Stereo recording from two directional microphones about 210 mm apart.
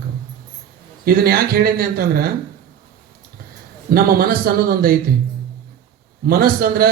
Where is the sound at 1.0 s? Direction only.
45° right (ahead or behind).